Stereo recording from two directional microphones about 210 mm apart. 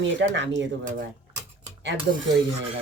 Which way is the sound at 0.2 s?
55° right (ahead or behind).